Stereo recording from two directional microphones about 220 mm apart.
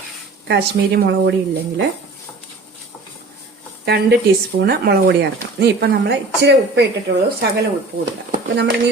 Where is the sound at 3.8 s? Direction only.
50° right (ahead or behind).